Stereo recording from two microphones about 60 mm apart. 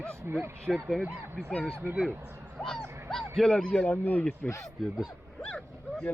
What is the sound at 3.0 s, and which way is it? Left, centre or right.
Speech, centre.